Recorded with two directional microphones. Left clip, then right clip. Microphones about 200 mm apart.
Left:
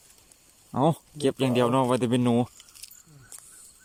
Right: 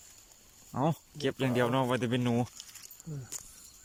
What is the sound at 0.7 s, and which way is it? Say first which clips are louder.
Speech: left 8 dB; 20° left (ahead or behind).